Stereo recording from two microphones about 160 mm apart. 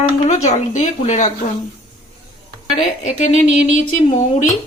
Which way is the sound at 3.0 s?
50° left (ahead or behind).